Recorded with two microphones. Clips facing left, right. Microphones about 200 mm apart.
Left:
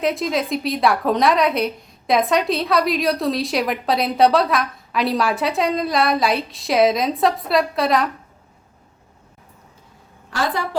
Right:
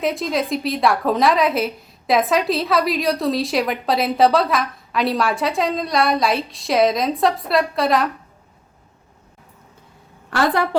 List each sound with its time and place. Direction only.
0.0 s a woman's voice: centre (ahead or behind)
10.2 s a woman's voice: 60° right (ahead or behind)